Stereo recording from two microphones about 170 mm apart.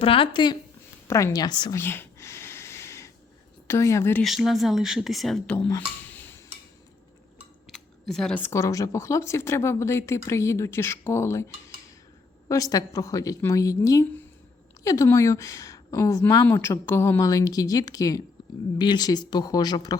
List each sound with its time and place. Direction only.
0.0 s speech: 30° left (ahead or behind)
1.0 s a woman's voice: 20° left (ahead or behind)
1.8 s a sound: 15° left (ahead or behind)
3.7 s speech: 15° left (ahead or behind)
4.2 s speech: centre (ahead or behind)
5.6 s a sound: 15° left (ahead or behind)
7.7 s a woman's voice: centre (ahead or behind); by 20.0 s 25° left (ahead or behind)